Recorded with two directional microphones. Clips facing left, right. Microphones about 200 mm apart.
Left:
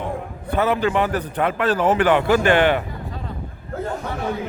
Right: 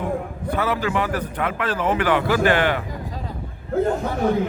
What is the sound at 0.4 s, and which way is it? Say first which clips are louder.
A man's voice: left 4 dB; 25° left (ahead or behind).